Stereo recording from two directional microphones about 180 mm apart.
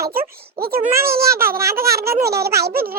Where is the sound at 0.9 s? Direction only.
15° right (ahead or behind).